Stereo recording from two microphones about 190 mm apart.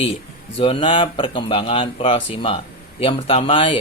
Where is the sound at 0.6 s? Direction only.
25° left (ahead or behind).